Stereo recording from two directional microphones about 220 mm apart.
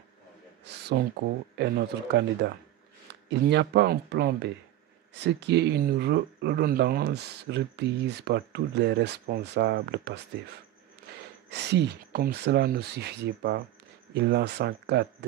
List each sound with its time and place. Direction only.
0.7 s a sound: 50° right (ahead or behind)
1.6 s speech: 50° right (ahead or behind)
3.3 s speech: 50° right (ahead or behind)
11.5 s speech: 50° right (ahead or behind)